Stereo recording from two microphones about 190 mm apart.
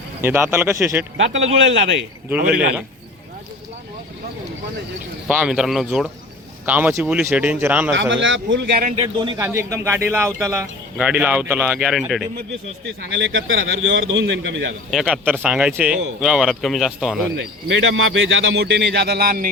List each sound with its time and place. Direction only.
0.2 s speech: 10° right (ahead or behind)
1.1 s a man's voice: 80° right
5.3 s speech: 5° right (ahead or behind)
7.9 s speech: 75° right (ahead or behind)
8.7 s speech: 45° right (ahead or behind)
9.0 s a man's voice: 25° right (ahead or behind); by 12.2 s centre (ahead or behind)
12.8 s a man's voice: 75° right (ahead or behind)
14.8 s speech: 5° right (ahead or behind)
17.7 s speech: 85° right; by 19.5 s 50° right (ahead or behind)